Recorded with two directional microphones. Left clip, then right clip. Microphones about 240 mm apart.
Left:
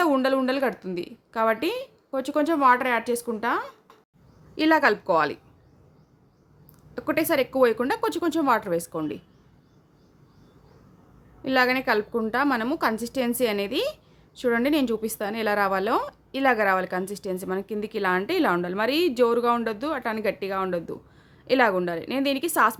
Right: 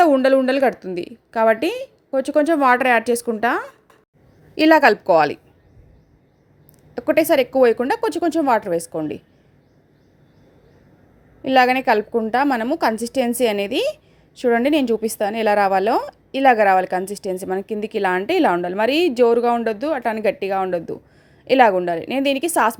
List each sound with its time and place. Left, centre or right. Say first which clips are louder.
0.0 s a woman's voice: right 8 dB; centre
6.9 s a woman's voice: right 8 dB; centre
11.4 s a woman's voice: right 7 dB; centre